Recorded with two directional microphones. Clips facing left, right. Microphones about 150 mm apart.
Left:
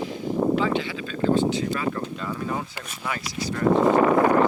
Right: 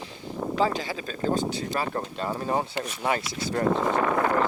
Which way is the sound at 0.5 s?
35° right (ahead or behind).